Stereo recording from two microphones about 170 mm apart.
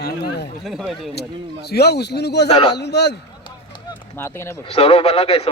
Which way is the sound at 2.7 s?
80° left.